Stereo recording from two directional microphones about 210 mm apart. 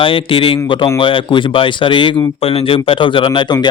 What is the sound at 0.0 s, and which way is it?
Speech, 25° left (ahead or behind).